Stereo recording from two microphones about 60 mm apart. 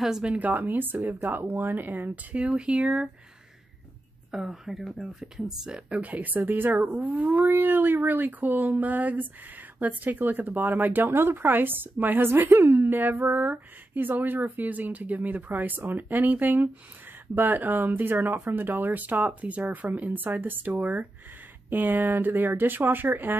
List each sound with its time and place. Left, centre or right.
0.0 s speech: centre
0.3 s speech: right
2.3 s speech: centre
4.3 s speech: centre
5.9 s speech: right